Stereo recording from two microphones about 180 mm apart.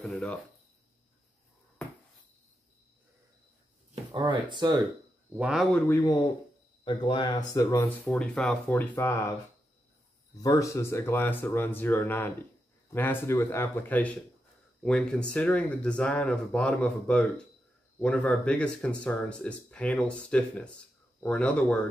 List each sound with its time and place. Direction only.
0.0 s speech: 5° left (ahead or behind)
3.9 s speech: 25° right (ahead or behind)
5.3 s speech: 5° right (ahead or behind)
5.9 s speech: 15° left (ahead or behind)
6.8 s speech: 25° left (ahead or behind)
10.4 s speech: 20° left (ahead or behind)